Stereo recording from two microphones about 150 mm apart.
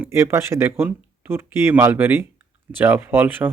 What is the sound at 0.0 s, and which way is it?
Speech, 15° right (ahead or behind).